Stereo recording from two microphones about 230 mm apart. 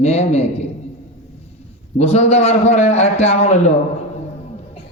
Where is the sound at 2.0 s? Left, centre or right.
Left.